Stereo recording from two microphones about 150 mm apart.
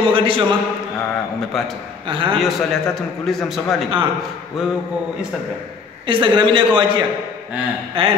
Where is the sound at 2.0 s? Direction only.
35° right (ahead or behind).